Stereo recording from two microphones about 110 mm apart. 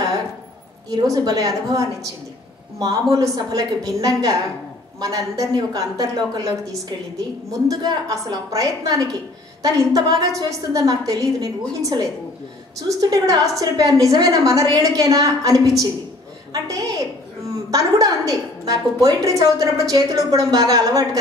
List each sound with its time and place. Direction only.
0.8 s a woman's voice: 35° right (ahead or behind)
13.0 s a woman's voice: 30° right (ahead or behind)
17.6 s a woman's voice: 30° right (ahead or behind)